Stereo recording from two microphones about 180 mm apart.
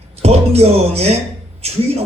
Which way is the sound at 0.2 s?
35° right (ahead or behind).